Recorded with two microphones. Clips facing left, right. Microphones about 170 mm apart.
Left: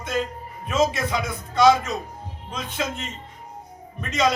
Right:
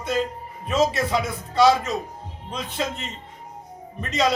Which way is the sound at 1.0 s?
30° right (ahead or behind).